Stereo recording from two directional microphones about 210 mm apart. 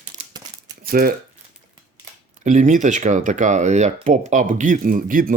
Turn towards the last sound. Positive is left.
turn(degrees=-40)  # may be behind; listen again after turning